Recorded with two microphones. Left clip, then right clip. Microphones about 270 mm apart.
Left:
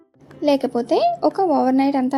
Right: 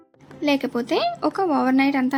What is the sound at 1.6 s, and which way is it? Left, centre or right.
Speech, centre.